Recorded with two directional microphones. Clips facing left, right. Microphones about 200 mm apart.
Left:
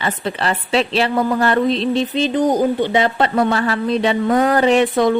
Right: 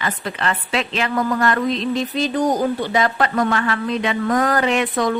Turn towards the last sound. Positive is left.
turn(degrees=30)  # may be behind; listen again after turning